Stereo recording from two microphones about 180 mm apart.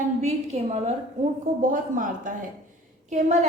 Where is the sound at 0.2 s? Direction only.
40° right (ahead or behind).